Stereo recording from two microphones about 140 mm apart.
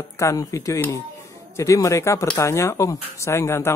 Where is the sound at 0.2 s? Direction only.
20° left (ahead or behind).